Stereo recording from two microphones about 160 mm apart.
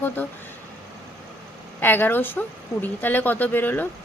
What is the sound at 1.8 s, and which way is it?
Speech, 10° left (ahead or behind).